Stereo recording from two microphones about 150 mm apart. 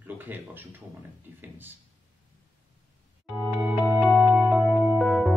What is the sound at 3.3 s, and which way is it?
Music, centre (ahead or behind).